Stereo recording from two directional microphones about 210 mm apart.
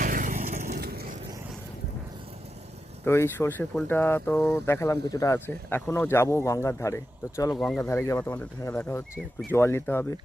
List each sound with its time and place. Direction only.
0.0 s vehicle: 40° right (ahead or behind)
3.0 s speech: 10° left (ahead or behind)